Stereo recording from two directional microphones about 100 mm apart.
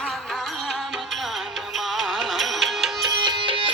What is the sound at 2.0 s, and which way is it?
Music, centre (ahead or behind).